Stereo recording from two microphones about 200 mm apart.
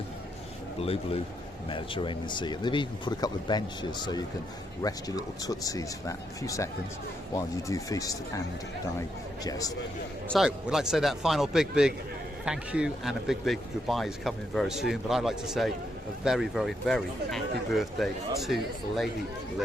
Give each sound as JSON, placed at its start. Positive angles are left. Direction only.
{"t": 0.8, "sound": "speech", "side_deg": 30}
{"t": 4.8, "sound": "speech", "side_deg": 20}
{"t": 10.2, "sound": "speech", "side_deg": 0}